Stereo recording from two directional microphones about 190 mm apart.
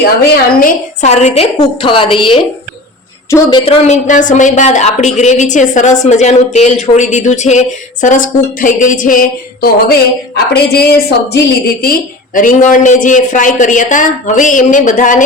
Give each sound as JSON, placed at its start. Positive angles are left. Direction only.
{"t": 1.0, "sound": "a woman's voice", "side_deg": 35}
{"t": 3.2, "sound": "a woman's voice", "side_deg": 15}
{"t": 3.7, "sound": "a woman's voice", "side_deg": 35}